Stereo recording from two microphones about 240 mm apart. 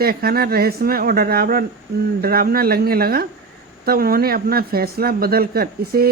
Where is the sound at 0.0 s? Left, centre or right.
Right.